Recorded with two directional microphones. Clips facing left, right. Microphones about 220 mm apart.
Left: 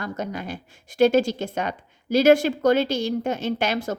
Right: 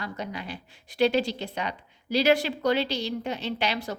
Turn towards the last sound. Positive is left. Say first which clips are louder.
# left 5 dB
turn(degrees=50)  # may be behind; listen again after turning